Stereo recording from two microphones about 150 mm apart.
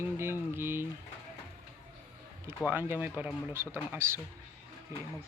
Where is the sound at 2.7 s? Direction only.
15° right (ahead or behind).